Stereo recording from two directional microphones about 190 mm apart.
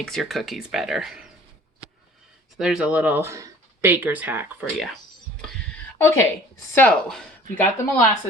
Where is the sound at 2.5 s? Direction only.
5° right (ahead or behind).